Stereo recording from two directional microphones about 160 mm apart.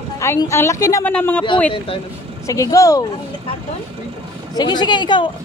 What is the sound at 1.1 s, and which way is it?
Speech, 10° left (ahead or behind).